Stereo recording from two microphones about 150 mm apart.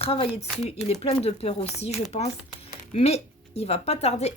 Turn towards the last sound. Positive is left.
turn(degrees=45)  # may be behind; listen again after turning